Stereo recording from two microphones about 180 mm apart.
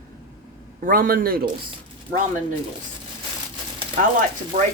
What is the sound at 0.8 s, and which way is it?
Speech, 50° right (ahead or behind).